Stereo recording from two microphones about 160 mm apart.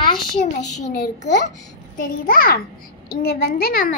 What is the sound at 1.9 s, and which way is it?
Speech, 60° left (ahead or behind).